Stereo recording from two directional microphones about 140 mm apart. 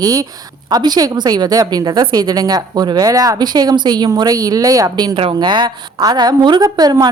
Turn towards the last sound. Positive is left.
turn(degrees=-30)  # may be behind; listen again after turning